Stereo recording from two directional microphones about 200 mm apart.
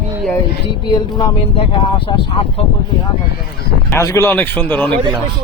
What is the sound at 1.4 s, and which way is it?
Speech, 30° left (ahead or behind).